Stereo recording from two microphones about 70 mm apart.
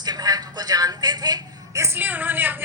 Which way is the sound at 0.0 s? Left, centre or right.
Right.